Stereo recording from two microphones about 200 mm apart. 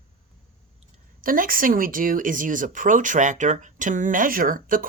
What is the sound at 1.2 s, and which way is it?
Speech, 45° right (ahead or behind).